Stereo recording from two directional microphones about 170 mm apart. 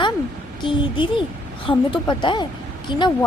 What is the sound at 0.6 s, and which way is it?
Speech, 30° left (ahead or behind).